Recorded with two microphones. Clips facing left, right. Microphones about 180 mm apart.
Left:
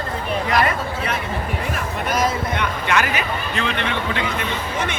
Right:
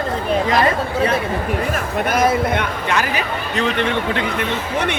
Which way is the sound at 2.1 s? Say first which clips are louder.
Right 5 dB; 55° right (ahead or behind).